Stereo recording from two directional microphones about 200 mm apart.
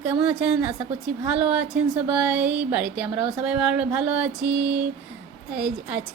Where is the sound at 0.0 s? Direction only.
5° right (ahead or behind).